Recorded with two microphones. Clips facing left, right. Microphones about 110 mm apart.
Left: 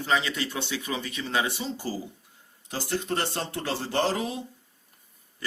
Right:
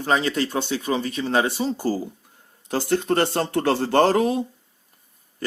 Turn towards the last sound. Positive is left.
turn(degrees=-55)  # may be behind; listen again after turning